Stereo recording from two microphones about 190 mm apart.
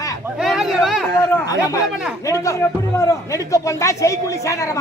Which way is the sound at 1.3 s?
15° left (ahead or behind).